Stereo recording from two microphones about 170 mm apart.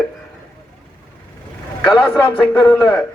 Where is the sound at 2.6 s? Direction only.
25° left (ahead or behind).